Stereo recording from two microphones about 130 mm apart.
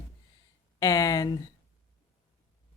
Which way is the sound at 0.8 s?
25° left (ahead or behind).